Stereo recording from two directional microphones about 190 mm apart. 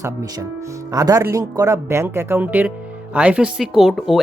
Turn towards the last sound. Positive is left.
turn(degrees=0)  # may be behind; listen again after turning